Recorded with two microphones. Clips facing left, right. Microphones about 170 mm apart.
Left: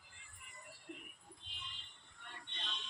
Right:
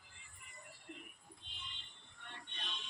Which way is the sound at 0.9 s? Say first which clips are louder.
Left 1 dB; centre (ahead or behind).